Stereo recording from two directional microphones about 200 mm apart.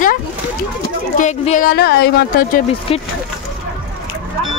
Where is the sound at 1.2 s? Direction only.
35° left (ahead or behind); by 2.3 s 55° left (ahead or behind).